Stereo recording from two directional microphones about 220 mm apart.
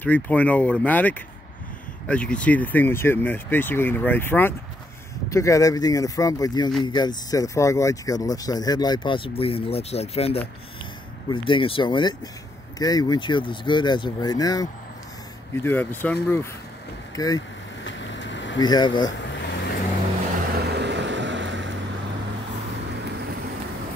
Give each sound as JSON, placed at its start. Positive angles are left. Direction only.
{"t": 0.0, "sound": "speech", "side_deg": 5}
{"t": 17.8, "sound": "vehicle", "side_deg": 55}
{"t": 18.6, "sound": "speech", "side_deg": 20}
{"t": 19.1, "sound": "vehicle", "side_deg": 55}
{"t": 20.5, "sound": "vehicle", "side_deg": -50}